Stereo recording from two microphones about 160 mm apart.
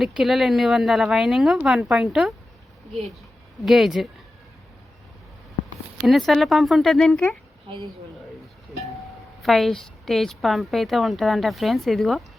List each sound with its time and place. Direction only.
0.0 s speech: centre (ahead or behind)
3.6 s speech: centre (ahead or behind)
6.0 s speech: centre (ahead or behind)
9.4 s speech: centre (ahead or behind)